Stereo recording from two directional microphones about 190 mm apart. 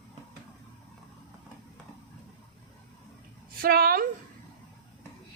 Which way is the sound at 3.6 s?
50° right (ahead or behind).